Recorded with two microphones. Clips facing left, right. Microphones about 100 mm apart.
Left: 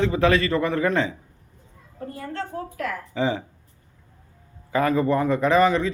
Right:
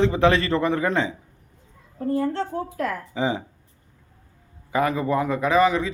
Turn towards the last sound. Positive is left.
turn(degrees=-10)  # may be behind; listen again after turning